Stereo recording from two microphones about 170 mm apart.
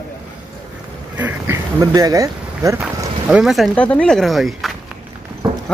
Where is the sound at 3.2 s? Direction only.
Centre (ahead or behind).